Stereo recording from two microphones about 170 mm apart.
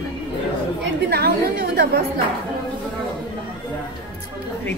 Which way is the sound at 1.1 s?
70° right (ahead or behind).